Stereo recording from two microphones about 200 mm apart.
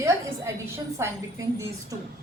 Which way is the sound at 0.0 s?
15° right (ahead or behind).